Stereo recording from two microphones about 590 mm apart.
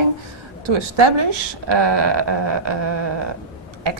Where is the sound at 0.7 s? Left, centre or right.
Right.